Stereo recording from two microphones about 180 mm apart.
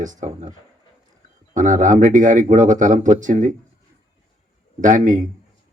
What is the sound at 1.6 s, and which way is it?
Speech, 45° right (ahead or behind).